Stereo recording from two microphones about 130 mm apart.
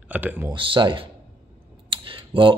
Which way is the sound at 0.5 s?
40° right (ahead or behind).